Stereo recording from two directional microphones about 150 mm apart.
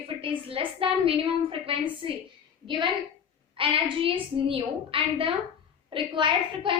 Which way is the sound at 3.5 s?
35° right (ahead or behind).